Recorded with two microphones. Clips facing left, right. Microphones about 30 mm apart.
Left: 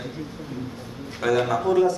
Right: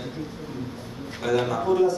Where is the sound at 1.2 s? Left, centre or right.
Left.